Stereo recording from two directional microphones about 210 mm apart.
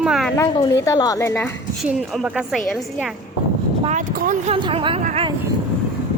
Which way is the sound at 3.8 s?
35° right (ahead or behind).